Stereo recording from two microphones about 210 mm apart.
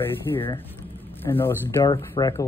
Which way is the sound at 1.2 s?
10° left (ahead or behind).